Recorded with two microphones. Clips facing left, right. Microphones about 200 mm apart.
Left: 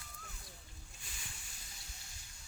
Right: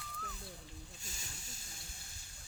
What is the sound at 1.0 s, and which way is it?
Snake, 45° right (ahead or behind).